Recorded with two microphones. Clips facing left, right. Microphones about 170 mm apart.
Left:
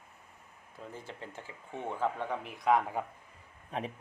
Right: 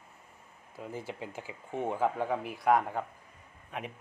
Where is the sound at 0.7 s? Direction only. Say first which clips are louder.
Right 5 dB; 10° right (ahead or behind).